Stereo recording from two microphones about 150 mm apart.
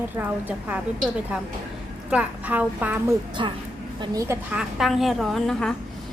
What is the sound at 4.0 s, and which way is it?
Speech, 20° right (ahead or behind).